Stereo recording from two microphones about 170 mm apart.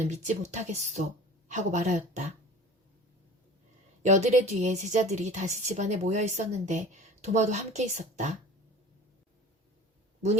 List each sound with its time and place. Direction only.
0.0 s a woman's voice: 40° right (ahead or behind)
4.0 s a woman's voice: 45° right (ahead or behind)